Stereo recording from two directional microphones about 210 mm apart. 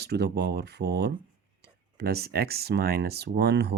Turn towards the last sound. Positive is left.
turn(degrees=-50)  # may be behind; listen again after turning